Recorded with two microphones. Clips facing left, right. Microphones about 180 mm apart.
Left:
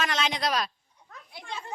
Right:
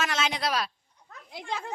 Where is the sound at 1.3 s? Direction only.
90° right.